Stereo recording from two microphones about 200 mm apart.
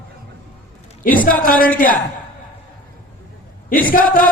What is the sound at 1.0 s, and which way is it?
Speech, 45° left (ahead or behind).